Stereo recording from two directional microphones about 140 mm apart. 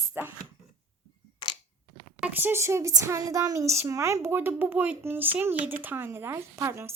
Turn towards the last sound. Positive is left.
turn(degrees=-20)  # may be behind; listen again after turning